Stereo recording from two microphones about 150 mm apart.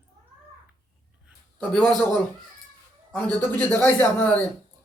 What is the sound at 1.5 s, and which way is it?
Speech, 5° left (ahead or behind).